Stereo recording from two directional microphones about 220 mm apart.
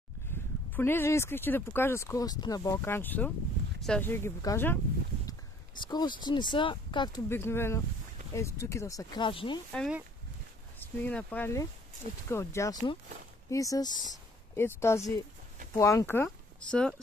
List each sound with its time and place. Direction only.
0.3 s a sound: 10° left (ahead or behind)
0.7 s speech: 10° left (ahead or behind)
5.8 s speech: 20° left (ahead or behind)
7.2 s speech: 10° left (ahead or behind)
9.7 s speech: centre (ahead or behind); by 14.0 s 20° left (ahead or behind)
14.1 s a sound: 10° left (ahead or behind)
15.7 s speech: 15° left (ahead or behind)